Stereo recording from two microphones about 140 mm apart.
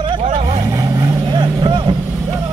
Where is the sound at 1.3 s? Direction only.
30° right (ahead or behind).